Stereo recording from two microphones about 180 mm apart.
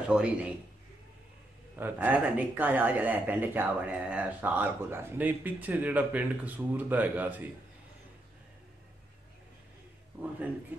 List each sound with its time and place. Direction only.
0.1 s a man's voice: 5° right (ahead or behind)
1.8 s speech: 10° right (ahead or behind)